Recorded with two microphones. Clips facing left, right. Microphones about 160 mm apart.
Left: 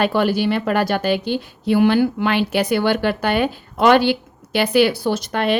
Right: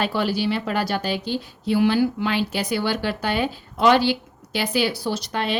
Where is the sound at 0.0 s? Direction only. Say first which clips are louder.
Left 5 dB; 55° left (ahead or behind).